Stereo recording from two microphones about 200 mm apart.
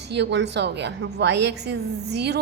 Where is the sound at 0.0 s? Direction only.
60° right (ahead or behind).